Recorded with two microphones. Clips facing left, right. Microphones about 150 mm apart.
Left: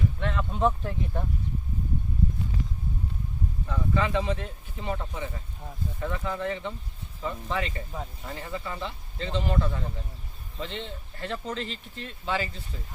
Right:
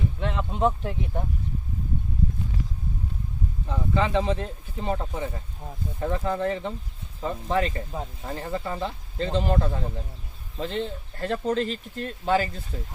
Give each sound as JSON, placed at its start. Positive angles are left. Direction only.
{"t": 0.2, "sound": "speech", "side_deg": -20}
{"t": 3.7, "sound": "speech", "side_deg": -25}